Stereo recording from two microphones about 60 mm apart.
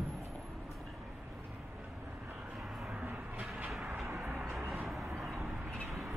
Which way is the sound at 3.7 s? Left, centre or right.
Centre.